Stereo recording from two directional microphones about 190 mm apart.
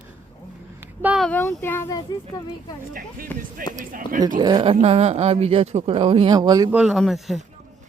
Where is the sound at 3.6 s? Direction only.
45° right (ahead or behind).